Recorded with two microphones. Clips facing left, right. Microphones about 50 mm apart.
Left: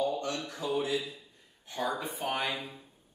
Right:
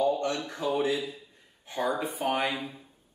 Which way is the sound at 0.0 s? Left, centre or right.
Right.